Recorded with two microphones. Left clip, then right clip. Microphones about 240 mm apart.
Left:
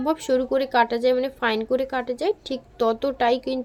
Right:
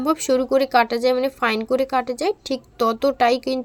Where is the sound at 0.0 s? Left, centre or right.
Right.